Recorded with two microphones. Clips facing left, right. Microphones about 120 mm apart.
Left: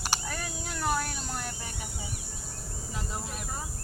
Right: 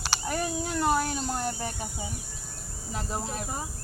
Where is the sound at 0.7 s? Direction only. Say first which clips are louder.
Right 4 dB; 20° right (ahead or behind).